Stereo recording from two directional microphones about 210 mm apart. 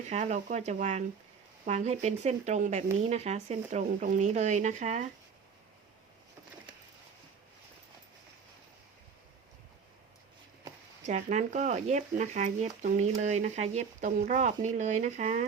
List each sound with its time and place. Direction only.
0.1 s speech: 35° right (ahead or behind)
11.0 s speech: 35° right (ahead or behind)